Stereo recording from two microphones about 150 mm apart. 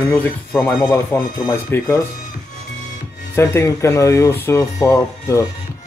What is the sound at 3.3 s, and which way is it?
Speech, 15° left (ahead or behind).